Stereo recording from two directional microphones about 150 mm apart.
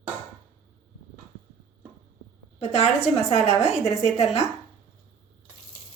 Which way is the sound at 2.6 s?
45° left (ahead or behind).